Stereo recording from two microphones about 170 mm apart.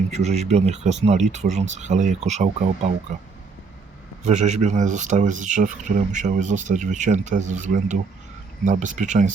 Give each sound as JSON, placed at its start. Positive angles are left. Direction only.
{"t": 0.1, "sound": "speech", "side_deg": -40}
{"t": 4.2, "sound": "speech", "side_deg": -45}